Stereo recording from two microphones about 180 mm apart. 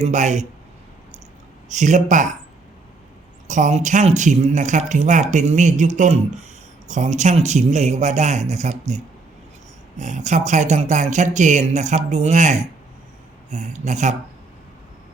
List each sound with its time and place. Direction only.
0.0 s speech: 40° right (ahead or behind)
1.7 s speech: 45° right (ahead or behind)
3.4 s speech: 40° right (ahead or behind)
10.0 s speech: 40° right (ahead or behind)